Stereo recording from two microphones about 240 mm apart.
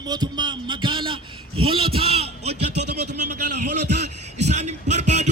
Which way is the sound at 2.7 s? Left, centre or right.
Right.